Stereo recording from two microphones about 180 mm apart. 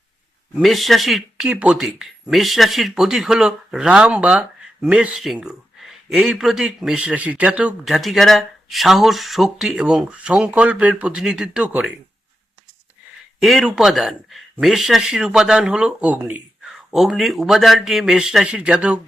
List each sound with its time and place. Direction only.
0.6 s speech: centre (ahead or behind)
13.4 s speech: centre (ahead or behind)